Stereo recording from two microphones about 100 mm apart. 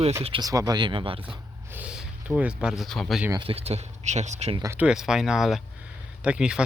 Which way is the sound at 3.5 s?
90° right.